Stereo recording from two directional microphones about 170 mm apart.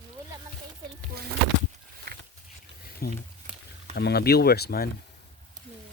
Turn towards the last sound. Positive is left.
turn(degrees=65)  # may be behind; listen again after turning